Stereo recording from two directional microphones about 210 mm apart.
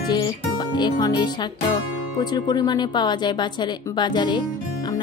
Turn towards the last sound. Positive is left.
turn(degrees=20)  # may be behind; listen again after turning